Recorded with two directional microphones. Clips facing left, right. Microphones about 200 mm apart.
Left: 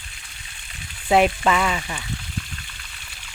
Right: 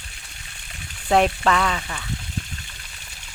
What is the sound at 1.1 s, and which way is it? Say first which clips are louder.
Speech: left 1 dB; 5° left (ahead or behind).